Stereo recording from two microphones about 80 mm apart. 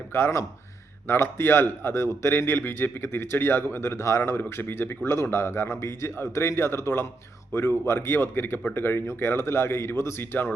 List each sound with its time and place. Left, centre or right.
0.1 s a man's voice: left